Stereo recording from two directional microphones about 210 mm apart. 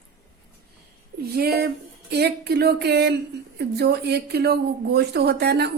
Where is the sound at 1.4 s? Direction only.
45° right (ahead or behind).